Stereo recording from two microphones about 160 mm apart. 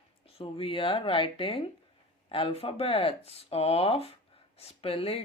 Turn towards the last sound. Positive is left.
turn(degrees=35)  # may be behind; listen again after turning